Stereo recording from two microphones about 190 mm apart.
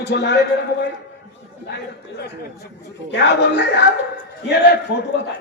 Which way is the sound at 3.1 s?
65° left (ahead or behind).